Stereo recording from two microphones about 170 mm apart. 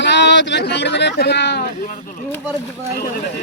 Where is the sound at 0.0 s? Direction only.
90° left; by 1.7 s 75° left (ahead or behind).